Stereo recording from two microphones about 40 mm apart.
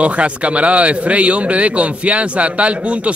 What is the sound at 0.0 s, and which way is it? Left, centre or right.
A man's voice, right.